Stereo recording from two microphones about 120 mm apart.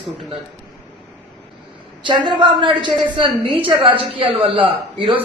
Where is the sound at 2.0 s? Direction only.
40° right (ahead or behind).